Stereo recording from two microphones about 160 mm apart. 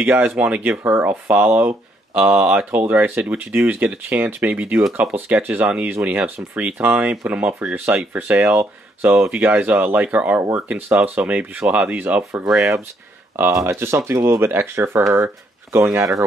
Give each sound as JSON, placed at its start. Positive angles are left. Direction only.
{"t": 0.0, "sound": "speech", "side_deg": -10}
{"t": 13.4, "sound": "speech", "side_deg": -15}